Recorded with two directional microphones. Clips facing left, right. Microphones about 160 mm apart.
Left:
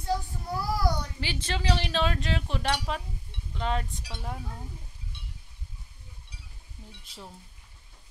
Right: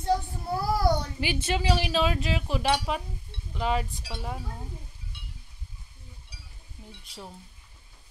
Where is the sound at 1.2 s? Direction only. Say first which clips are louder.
Right 2 dB; 15° right (ahead or behind).